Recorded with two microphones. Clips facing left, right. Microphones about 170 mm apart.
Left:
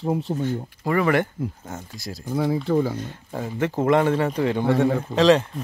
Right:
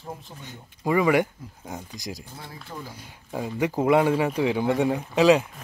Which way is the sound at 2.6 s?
75° left (ahead or behind).